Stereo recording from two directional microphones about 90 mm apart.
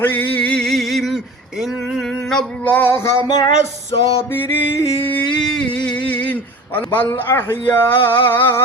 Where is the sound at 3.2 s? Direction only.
50° left (ahead or behind).